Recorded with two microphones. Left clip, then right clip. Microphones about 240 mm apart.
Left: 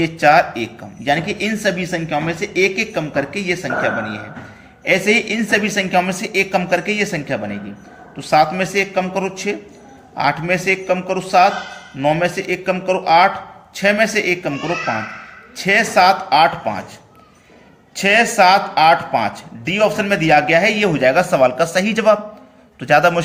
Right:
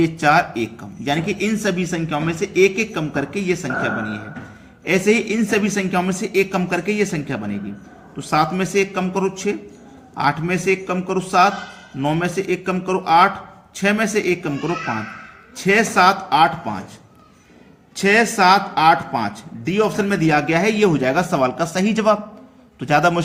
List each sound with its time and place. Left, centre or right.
0.0 s speech: centre
15.5 s speech: centre
17.9 s a man's voice: centre